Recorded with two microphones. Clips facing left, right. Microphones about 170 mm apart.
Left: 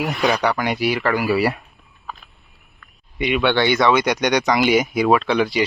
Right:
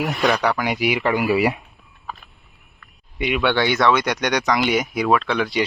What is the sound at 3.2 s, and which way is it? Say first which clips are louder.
Speech: left 2 dB; 5° right (ahead or behind).